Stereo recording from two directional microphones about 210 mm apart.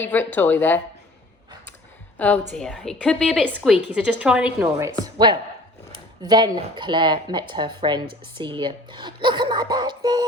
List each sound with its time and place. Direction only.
0.0 s speech: 10° left (ahead or behind)
2.1 s a woman's voice: 5° left (ahead or behind)
4.9 s speech: 20° right (ahead or behind)